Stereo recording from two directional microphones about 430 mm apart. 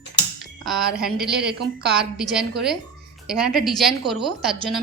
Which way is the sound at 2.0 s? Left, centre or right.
Centre.